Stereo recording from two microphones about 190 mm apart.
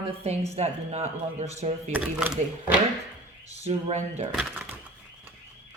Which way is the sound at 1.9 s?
5° right (ahead or behind).